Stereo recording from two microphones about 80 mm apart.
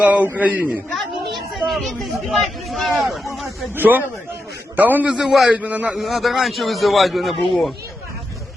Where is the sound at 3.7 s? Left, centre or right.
Right.